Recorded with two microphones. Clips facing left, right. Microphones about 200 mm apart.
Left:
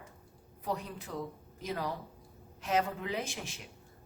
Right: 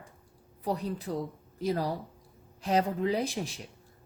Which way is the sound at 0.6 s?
35° right (ahead or behind).